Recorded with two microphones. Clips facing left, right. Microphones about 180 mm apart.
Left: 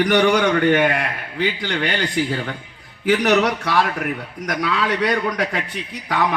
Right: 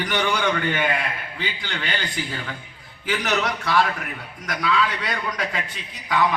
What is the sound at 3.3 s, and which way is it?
A man's voice, 60° left (ahead or behind).